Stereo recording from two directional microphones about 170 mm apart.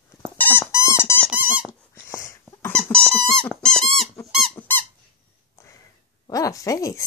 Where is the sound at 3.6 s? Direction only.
5° left (ahead or behind).